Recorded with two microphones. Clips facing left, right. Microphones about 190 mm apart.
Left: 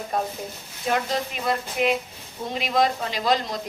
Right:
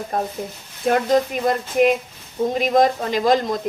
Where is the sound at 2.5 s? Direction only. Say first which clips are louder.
Right 5 dB; 45° right (ahead or behind).